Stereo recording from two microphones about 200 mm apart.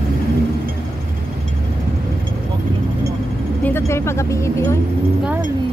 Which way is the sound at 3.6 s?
10° left (ahead or behind).